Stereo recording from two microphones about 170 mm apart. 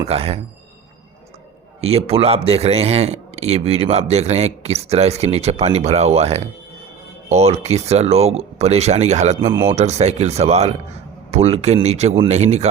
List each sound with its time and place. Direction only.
0.0 s a man's voice: 35° right (ahead or behind)
1.8 s a man's voice: 35° right (ahead or behind)